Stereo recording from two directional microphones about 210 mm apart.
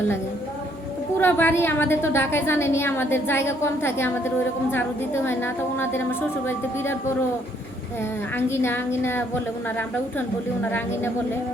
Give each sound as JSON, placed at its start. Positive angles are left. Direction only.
{"t": 1.2, "sound": "a woman's voice", "side_deg": 10}
{"t": 8.4, "sound": "a woman's voice", "side_deg": 10}